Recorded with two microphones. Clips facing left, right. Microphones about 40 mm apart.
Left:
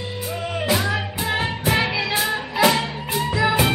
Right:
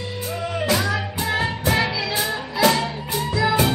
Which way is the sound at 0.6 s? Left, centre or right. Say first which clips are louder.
Even; centre.